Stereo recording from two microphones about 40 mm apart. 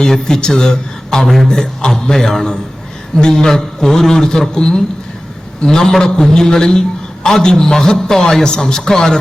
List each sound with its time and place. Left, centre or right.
0.0 s a man's voice: centre